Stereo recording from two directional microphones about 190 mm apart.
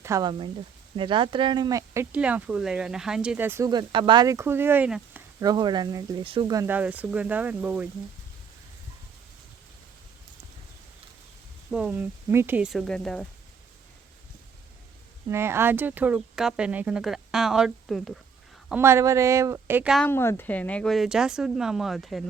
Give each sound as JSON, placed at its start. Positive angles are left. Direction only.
{"t": 0.0, "sound": "speech", "side_deg": -20}
{"t": 5.4, "sound": "speech", "side_deg": -20}
{"t": 11.7, "sound": "speech", "side_deg": -5}
{"t": 15.3, "sound": "speech", "side_deg": -15}
{"t": 18.7, "sound": "speech", "side_deg": -15}
{"t": 20.1, "sound": "speech", "side_deg": 10}